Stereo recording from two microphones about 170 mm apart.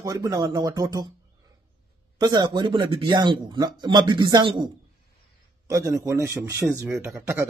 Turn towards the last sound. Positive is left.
turn(degrees=-15)  # may be behind; listen again after turning